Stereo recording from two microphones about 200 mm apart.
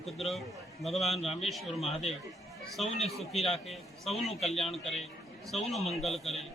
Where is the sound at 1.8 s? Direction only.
30° left (ahead or behind).